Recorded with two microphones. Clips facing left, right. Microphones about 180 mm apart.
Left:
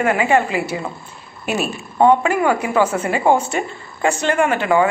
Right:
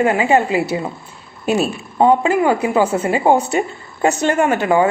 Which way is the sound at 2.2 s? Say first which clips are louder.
Right 2 dB; 25° right (ahead or behind).